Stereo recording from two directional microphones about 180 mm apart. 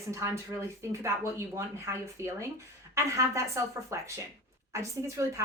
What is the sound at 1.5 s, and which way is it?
Speech, 15° right (ahead or behind).